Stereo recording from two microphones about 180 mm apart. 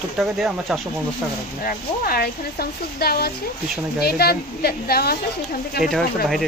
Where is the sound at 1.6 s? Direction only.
60° left (ahead or behind).